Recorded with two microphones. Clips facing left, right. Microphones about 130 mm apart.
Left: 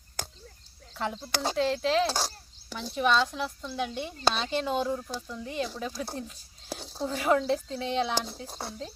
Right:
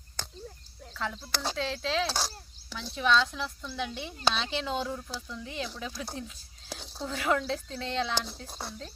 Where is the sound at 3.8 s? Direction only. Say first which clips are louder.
Left 2 dB; 45° left (ahead or behind).